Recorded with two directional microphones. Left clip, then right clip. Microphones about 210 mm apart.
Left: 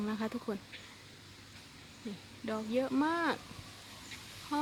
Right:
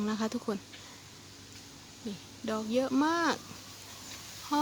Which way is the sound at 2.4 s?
10° right (ahead or behind).